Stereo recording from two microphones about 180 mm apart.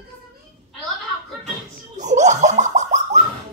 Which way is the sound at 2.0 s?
40° right (ahead or behind).